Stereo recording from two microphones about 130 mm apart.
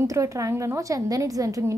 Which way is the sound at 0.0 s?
25° right (ahead or behind).